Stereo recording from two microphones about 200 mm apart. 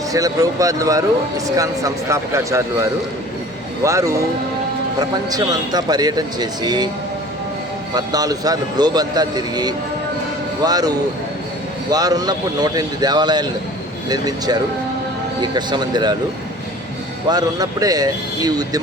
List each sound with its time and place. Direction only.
0.1 s speech: 15° right (ahead or behind)
3.8 s speech: 15° right (ahead or behind)
7.9 s speech: 20° right (ahead or behind)
17.2 s speech: 20° right (ahead or behind)